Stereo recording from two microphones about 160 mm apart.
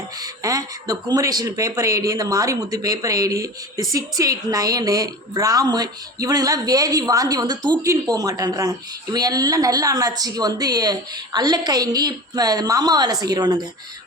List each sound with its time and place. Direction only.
0.2 s speech: 20° right (ahead or behind)